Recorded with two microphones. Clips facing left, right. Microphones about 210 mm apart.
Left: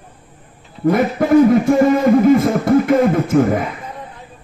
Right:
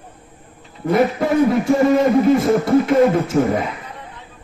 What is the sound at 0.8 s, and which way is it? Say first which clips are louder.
Beatboxing: left 2 dB; 50° left (ahead or behind).